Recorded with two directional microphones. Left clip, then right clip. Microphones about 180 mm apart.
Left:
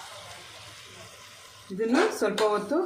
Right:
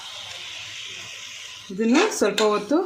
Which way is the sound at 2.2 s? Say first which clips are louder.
Right 5 dB; 55° right (ahead or behind).